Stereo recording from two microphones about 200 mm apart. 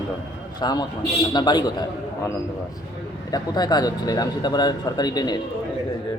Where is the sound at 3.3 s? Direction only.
20° left (ahead or behind).